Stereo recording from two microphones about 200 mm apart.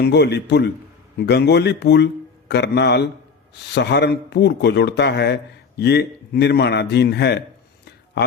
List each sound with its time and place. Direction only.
0.0 s speech: 55° left (ahead or behind)